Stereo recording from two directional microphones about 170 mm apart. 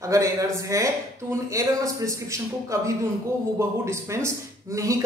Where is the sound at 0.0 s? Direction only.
20° right (ahead or behind).